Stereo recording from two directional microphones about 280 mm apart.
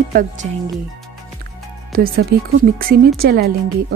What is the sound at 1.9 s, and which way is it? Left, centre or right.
Speech, right.